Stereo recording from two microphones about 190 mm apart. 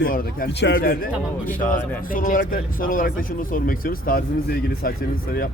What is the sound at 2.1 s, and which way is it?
Speech, 45° left (ahead or behind).